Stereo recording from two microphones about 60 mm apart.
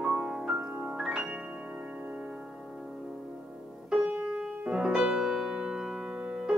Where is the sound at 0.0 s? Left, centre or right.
Centre.